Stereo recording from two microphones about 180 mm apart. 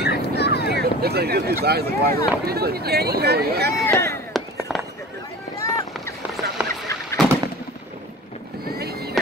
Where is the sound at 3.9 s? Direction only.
15° left (ahead or behind).